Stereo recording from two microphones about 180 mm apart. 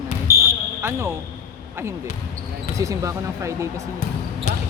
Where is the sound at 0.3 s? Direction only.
55° right (ahead or behind).